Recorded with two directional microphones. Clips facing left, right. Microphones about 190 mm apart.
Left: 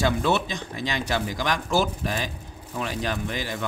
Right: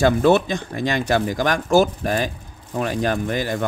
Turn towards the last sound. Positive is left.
turn(degrees=-50)  # may be behind; listen again after turning